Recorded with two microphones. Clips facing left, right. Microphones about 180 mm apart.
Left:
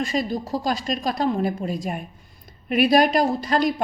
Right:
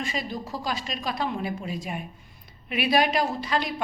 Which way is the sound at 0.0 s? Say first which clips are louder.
Left 7 dB; 40° left (ahead or behind).